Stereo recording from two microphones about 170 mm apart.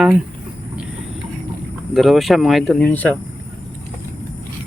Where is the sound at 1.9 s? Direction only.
Centre (ahead or behind).